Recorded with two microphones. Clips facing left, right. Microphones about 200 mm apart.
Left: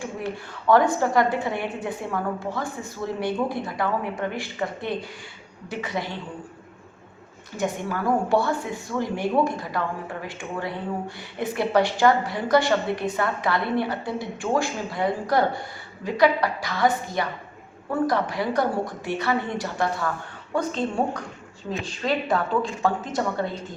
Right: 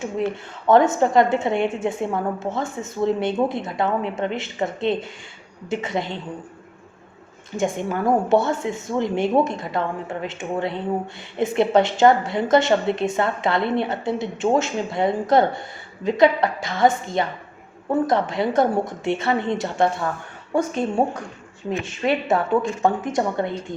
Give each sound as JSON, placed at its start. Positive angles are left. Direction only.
{"t": 0.7, "sound": "a woman's voice", "side_deg": -20}
{"t": 7.5, "sound": "a woman's voice", "side_deg": -25}
{"t": 22.0, "sound": "a woman's voice", "side_deg": -20}